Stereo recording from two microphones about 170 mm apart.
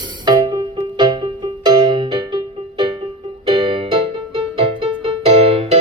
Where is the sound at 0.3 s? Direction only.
25° right (ahead or behind).